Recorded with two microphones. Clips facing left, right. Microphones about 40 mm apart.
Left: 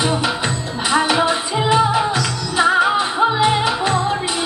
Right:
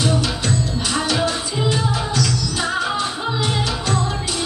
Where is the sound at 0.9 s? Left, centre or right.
Left.